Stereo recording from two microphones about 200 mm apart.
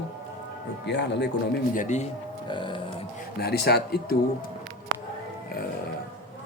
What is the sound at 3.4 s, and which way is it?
Speech, 55° left (ahead or behind).